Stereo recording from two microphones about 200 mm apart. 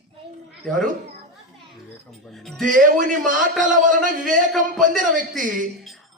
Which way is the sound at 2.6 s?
40° right (ahead or behind).